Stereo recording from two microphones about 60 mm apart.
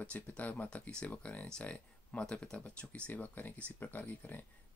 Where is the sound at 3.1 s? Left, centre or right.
Left.